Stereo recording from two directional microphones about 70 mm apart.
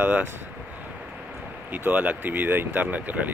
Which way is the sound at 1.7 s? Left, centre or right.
Right.